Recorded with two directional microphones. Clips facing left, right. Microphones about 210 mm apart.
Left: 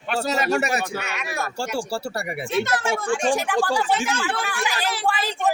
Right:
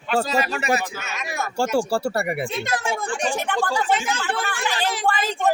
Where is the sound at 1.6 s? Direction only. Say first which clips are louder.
Right 9 dB; 60° right (ahead or behind).